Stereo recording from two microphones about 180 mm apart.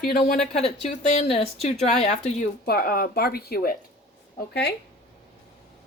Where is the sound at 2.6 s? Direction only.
55° left (ahead or behind).